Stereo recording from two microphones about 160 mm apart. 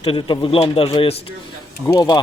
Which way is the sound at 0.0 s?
35° left (ahead or behind).